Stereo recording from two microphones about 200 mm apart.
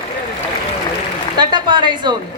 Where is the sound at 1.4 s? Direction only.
20° right (ahead or behind).